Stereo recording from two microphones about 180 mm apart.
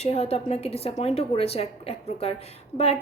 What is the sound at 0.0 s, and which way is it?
A woman's voice, 35° left (ahead or behind).